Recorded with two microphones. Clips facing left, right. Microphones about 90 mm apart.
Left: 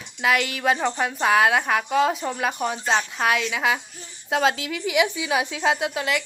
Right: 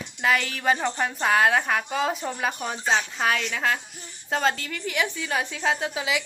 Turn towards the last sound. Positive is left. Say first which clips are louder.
# left 2 dB
turn(degrees=0)  # may be behind; listen again after turning